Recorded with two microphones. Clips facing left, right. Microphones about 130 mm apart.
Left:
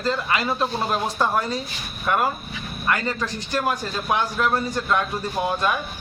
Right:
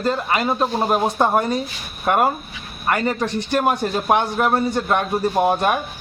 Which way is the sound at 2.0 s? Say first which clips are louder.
Right 4 dB; 45° right (ahead or behind).